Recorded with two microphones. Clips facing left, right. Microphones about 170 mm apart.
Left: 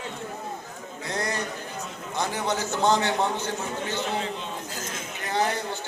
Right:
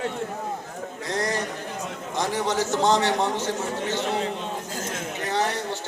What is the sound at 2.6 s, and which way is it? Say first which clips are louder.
A man's voice: right 1 dB; 90° right.